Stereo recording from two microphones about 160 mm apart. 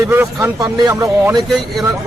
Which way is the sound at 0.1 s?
15° right (ahead or behind).